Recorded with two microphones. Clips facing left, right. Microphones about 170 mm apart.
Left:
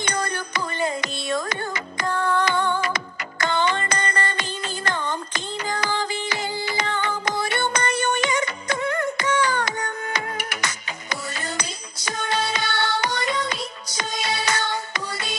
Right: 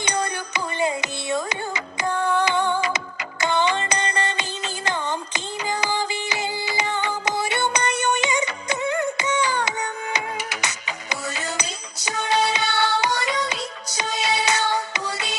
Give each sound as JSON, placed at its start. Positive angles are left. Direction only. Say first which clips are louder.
{"t": 0.0, "sound": "music", "louder": "right 1 dB", "side_deg": -15}